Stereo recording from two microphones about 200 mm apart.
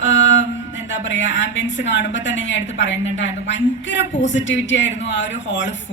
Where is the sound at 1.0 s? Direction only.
65° left (ahead or behind).